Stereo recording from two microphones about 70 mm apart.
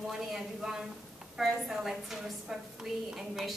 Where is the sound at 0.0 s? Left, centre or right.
Centre.